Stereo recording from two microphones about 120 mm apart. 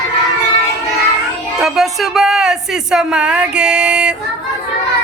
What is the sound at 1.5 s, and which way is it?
Speech, 5° right (ahead or behind).